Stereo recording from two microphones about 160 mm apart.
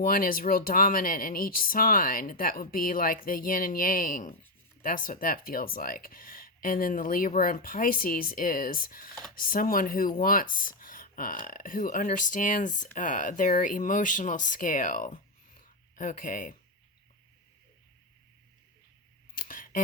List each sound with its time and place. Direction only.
0.0 s speech: 60° left (ahead or behind)
15.6 s a sound: 55° left (ahead or behind)
19.3 s camera: 60° left (ahead or behind)